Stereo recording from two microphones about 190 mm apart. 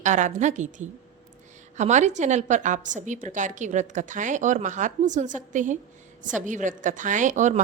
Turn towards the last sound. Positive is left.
turn(degrees=-40)  # may be behind; listen again after turning